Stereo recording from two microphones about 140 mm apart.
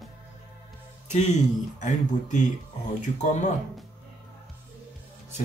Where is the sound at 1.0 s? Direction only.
55° left (ahead or behind).